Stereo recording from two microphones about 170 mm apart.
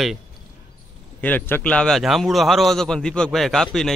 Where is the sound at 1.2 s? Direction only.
10° left (ahead or behind).